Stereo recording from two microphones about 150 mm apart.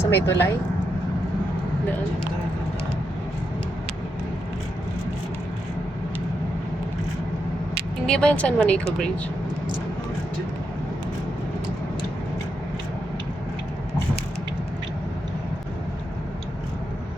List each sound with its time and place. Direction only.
0.0 s speech: 15° left (ahead or behind)
8.0 s speech: 5° left (ahead or behind)